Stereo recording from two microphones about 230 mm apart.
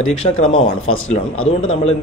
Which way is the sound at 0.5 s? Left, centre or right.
Left.